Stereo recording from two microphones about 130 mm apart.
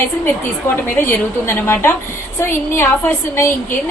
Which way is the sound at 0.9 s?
15° left (ahead or behind).